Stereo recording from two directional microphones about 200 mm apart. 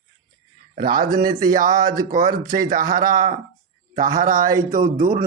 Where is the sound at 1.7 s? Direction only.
20° right (ahead or behind).